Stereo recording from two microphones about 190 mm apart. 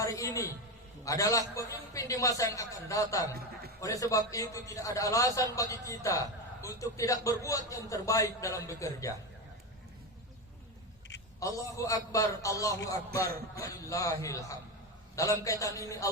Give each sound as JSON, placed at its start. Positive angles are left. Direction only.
{"t": 0.0, "sound": "a man's voice", "side_deg": 15}
{"t": 11.3, "sound": "a man's voice", "side_deg": 15}